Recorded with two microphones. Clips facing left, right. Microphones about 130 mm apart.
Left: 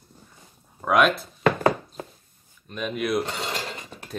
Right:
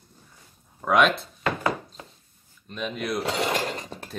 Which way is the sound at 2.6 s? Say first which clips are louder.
Left 3 dB; 5° left (ahead or behind).